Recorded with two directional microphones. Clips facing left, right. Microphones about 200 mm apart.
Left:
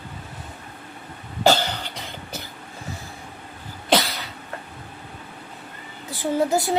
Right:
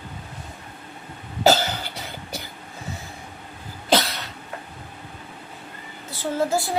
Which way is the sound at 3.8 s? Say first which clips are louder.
Even; centre (ahead or behind).